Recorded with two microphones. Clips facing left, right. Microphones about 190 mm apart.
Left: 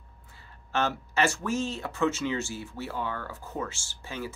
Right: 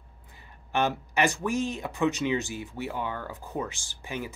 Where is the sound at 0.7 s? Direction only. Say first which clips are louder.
Right 1 dB; 15° right (ahead or behind).